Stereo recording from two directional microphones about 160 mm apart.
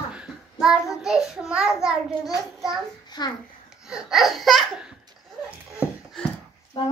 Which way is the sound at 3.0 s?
25° left (ahead or behind).